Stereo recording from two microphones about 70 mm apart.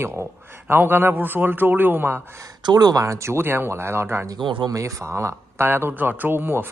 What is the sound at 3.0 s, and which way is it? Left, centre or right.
Speech, right.